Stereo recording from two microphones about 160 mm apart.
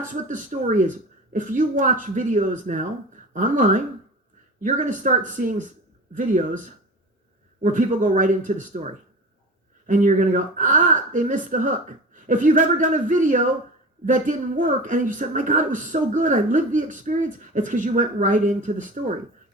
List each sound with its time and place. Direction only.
0.0 s speech: 55° right (ahead or behind)